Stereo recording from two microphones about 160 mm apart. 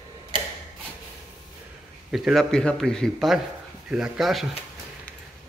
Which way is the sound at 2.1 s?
Centre (ahead or behind).